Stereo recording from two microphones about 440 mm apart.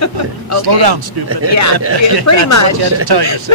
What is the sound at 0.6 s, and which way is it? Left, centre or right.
Speech, right.